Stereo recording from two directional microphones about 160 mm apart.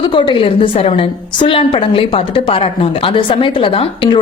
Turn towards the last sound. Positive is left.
turn(degrees=35)  # may be behind; listen again after turning